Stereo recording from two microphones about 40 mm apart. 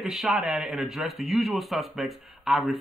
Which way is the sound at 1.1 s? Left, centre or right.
Centre.